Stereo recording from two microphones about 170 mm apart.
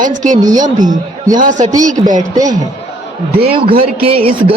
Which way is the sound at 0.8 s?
50° right (ahead or behind).